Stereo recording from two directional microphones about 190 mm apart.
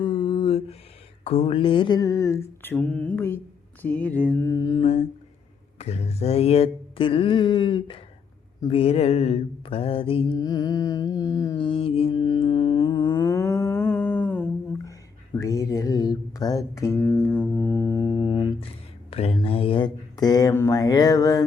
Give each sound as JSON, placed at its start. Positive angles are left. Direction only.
{"t": 0.0, "sound": "a sound", "side_deg": 25}
{"t": 1.2, "sound": "mantra", "side_deg": 35}
{"t": 5.8, "sound": "speech", "side_deg": 35}
{"t": 8.6, "sound": "mantra", "side_deg": 30}
{"t": 15.4, "sound": "music", "side_deg": 15}
{"t": 19.1, "sound": "speech", "side_deg": 30}